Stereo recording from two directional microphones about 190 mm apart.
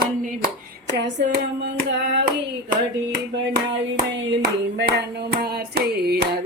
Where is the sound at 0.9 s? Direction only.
65° right (ahead or behind).